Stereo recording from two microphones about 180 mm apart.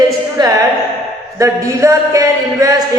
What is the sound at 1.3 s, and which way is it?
Speech, 15° right (ahead or behind).